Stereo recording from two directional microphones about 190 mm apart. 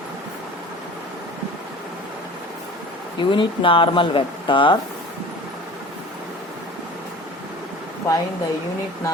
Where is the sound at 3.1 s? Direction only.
25° left (ahead or behind).